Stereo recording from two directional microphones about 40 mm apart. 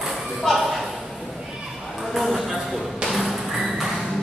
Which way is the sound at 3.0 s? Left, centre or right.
Centre.